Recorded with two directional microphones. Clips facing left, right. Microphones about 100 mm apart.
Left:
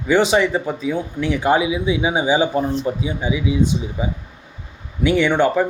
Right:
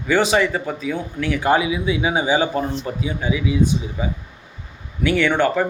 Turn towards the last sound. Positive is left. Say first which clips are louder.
# left 2 dB
turn(degrees=15)  # may be behind; listen again after turning